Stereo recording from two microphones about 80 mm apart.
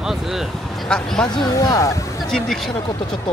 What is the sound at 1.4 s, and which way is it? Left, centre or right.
Speech, left.